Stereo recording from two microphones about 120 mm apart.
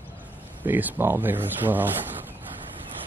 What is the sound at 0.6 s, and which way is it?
Speech, 15° right (ahead or behind).